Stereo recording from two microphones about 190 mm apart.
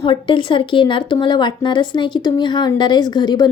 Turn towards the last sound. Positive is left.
turn(degrees=20)  # may be behind; listen again after turning